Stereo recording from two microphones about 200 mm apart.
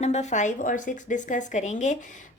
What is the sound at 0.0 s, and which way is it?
A woman's voice, 35° left (ahead or behind).